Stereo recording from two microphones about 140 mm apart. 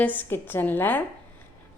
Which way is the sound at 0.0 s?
15° left (ahead or behind).